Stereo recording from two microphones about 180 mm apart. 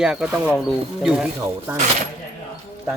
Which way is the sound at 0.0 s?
5° right (ahead or behind).